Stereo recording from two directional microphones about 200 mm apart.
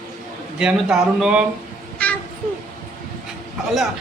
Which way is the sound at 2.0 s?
5° left (ahead or behind).